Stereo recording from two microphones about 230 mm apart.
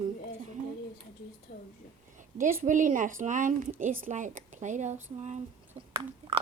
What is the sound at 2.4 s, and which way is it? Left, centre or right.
A woman's voice, right.